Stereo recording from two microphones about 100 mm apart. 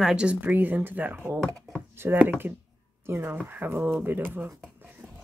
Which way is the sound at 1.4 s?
Centre (ahead or behind).